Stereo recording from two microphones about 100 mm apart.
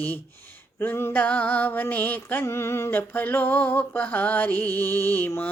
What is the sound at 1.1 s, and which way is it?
Music, 15° left (ahead or behind).